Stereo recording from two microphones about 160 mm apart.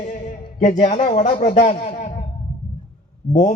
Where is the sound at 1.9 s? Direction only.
45° left (ahead or behind).